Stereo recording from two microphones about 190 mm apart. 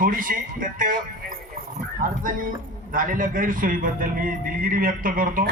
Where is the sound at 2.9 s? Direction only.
45° right (ahead or behind).